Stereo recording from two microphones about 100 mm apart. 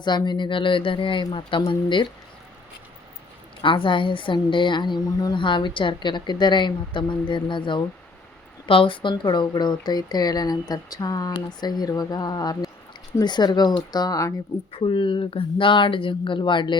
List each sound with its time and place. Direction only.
0.0 s speech: 50° left (ahead or behind)
3.6 s a woman's voice: 55° left (ahead or behind); by 14.3 s 35° left (ahead or behind)
14.7 s speech: 60° left (ahead or behind)